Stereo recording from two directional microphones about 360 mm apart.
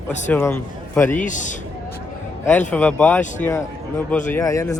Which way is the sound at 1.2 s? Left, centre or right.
Left.